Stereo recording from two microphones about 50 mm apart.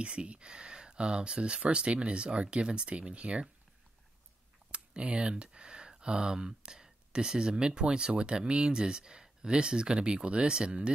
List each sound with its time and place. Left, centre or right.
0.0 s speech: right
4.6 s speech: right